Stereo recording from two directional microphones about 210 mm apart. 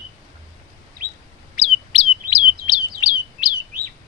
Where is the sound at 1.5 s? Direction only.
25° left (ahead or behind).